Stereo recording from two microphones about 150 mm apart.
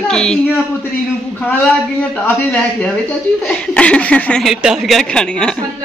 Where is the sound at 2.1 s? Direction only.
10° left (ahead or behind).